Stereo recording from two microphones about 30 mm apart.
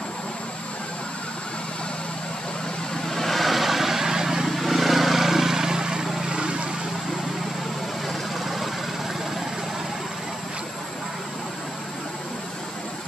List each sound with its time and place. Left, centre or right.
3.1 s vehicle: centre
4.6 s vehicle: centre; by 6.6 s right